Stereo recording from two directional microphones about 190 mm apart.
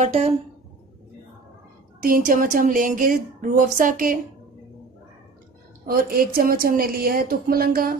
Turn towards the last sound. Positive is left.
turn(degrees=-50)  # may be behind; listen again after turning